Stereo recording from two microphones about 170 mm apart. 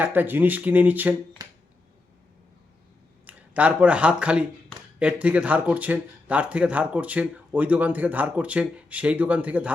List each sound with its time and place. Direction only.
0.0 s speech: 10° right (ahead or behind)
1.4 s finger snapping: 20° right (ahead or behind)
3.2 s speech: 10° right (ahead or behind)